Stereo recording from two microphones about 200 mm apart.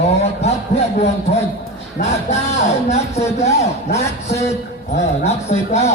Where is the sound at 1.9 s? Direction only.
35° left (ahead or behind).